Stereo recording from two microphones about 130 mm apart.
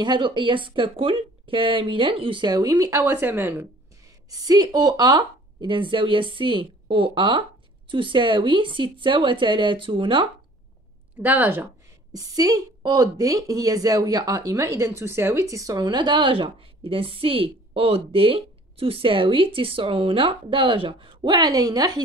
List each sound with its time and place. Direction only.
0.0 s a woman's voice: 35° right (ahead or behind); by 3.6 s 15° right (ahead or behind)
4.3 s a woman's voice: 30° right (ahead or behind)
11.1 s speech: 15° right (ahead or behind)
12.2 s a woman's voice: 30° right (ahead or behind)